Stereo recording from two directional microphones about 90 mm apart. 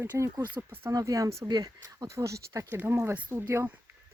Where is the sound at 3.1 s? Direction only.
25° right (ahead or behind).